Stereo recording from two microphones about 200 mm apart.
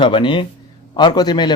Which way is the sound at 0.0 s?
25° left (ahead or behind).